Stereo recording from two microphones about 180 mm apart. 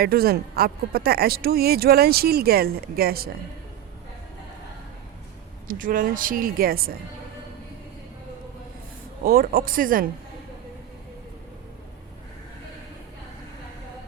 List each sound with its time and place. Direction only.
0.0 s speech: 55° right (ahead or behind)
5.6 s a woman's voice: 50° right (ahead or behind)
9.2 s a woman's voice: 55° right (ahead or behind)